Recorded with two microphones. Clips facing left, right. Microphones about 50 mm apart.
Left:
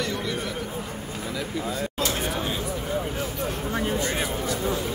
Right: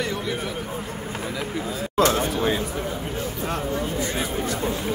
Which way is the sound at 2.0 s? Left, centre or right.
Right.